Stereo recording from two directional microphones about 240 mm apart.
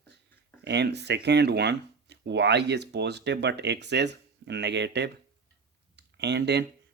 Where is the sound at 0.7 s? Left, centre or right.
Right.